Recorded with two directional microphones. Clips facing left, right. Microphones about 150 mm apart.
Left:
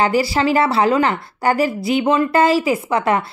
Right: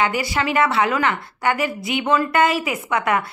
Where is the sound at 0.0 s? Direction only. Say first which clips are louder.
Left 5 dB; 35° left (ahead or behind).